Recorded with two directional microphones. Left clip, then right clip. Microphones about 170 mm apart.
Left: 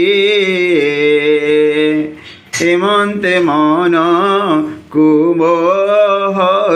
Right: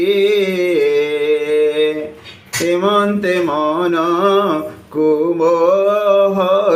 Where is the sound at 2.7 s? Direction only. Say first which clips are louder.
Left 2 dB; 20° left (ahead or behind).